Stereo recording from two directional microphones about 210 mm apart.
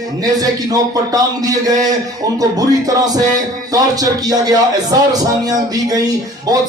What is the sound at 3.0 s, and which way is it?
Speech, 15° right (ahead or behind).